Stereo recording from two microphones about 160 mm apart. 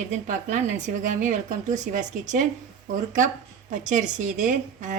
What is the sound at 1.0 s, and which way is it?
A woman's voice, 50° right (ahead or behind).